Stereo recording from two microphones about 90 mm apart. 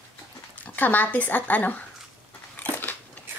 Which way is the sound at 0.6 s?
20° left (ahead or behind).